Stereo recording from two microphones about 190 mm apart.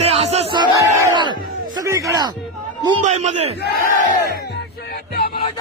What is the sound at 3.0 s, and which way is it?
Speech, 35° right (ahead or behind).